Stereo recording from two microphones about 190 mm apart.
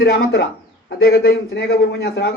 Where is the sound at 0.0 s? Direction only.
55° left (ahead or behind).